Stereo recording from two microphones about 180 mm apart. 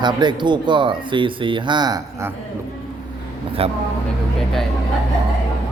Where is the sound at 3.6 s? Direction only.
30° right (ahead or behind).